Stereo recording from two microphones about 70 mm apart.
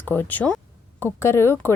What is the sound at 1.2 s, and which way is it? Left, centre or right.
Speech, left.